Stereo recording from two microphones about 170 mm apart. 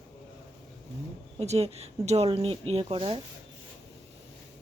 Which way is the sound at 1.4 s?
40° right (ahead or behind).